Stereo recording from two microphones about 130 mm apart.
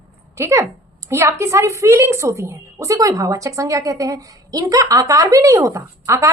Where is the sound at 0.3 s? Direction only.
20° right (ahead or behind).